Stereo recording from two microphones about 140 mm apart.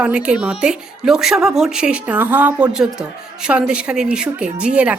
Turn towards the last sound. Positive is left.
turn(degrees=-10)  # may be behind; listen again after turning